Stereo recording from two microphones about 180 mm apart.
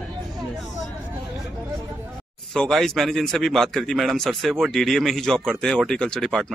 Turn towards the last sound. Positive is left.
turn(degrees=0)  # may be behind; listen again after turning